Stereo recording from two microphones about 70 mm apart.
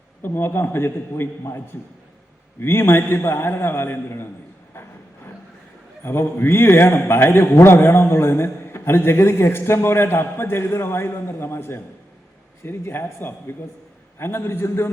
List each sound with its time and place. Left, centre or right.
0.2 s a man's voice: left
4.7 s a sound: left
6.0 s a man's voice: left